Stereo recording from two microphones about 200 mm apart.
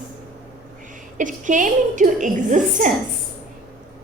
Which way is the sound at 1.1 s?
40° right (ahead or behind).